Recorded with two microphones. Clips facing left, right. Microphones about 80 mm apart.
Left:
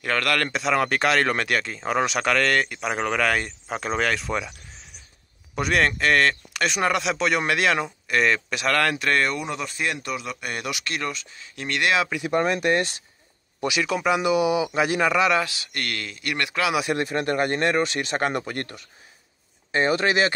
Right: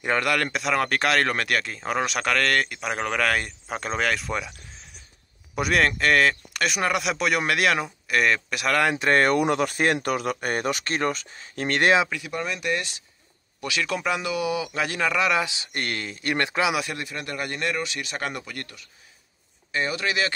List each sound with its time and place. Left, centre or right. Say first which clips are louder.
0.0 s speech: even; centre
9.1 s speech: right 4 dB; right
12.3 s speech: left 6 dB; left
13.8 s speech: left 4 dB; centre
14.2 s speech: left 6 dB; left; by 15.4 s centre
15.4 s a man's voice: right 1 dB; right
16.9 s speech: left 9 dB; left